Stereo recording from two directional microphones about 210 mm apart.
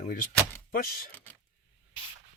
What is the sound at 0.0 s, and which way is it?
Speech, 40° left (ahead or behind).